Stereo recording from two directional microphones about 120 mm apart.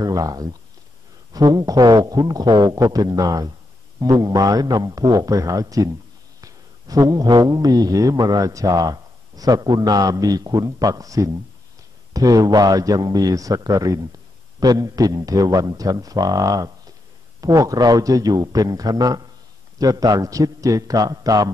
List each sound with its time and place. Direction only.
0.0 s speech: 30° right (ahead or behind)